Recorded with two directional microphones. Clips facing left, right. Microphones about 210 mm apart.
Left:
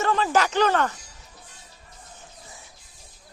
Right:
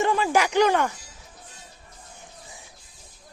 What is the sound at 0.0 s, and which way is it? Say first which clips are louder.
Speech: right 1 dB; 10° right (ahead or behind).